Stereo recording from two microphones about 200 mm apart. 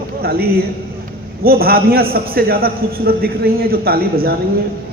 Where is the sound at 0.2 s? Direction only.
50° right (ahead or behind).